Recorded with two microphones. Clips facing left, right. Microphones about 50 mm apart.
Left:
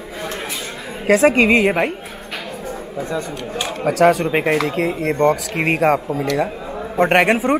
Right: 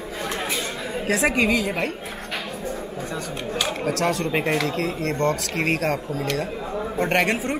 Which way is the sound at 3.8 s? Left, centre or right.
Centre.